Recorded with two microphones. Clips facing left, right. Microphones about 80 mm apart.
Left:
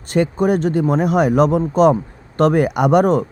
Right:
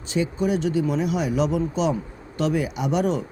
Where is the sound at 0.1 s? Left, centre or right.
Left.